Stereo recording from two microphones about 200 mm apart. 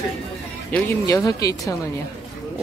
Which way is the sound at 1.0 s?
15° left (ahead or behind).